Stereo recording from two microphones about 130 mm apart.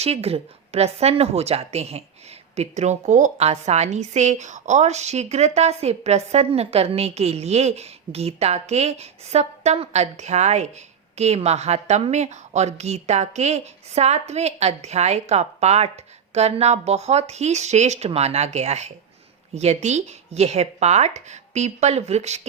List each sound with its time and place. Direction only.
0.0 s a woman's voice: 50° right (ahead or behind)